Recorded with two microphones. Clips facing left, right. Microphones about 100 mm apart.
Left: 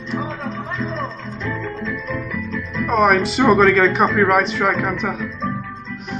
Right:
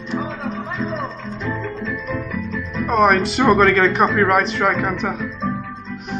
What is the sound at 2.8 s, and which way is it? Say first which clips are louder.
Speech: even; centre (ahead or behind).